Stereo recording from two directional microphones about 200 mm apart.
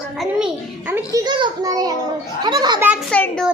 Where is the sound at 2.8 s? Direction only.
5° right (ahead or behind).